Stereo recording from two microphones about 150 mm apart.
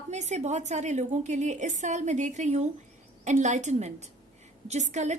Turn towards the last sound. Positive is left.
turn(degrees=-50)  # may be behind; listen again after turning